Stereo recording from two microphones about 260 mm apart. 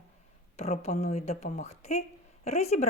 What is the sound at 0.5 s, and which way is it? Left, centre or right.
Speech, left.